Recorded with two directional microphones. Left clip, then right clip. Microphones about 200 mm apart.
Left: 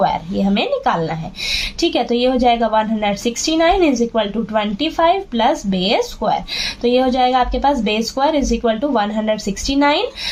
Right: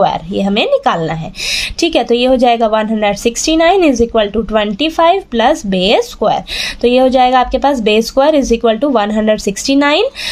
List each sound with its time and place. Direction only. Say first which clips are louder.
0.0 s a woman's voice: right 4 dB; 45° right (ahead or behind)